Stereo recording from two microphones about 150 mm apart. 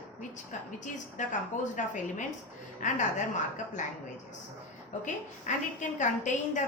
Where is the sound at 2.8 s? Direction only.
55° left (ahead or behind).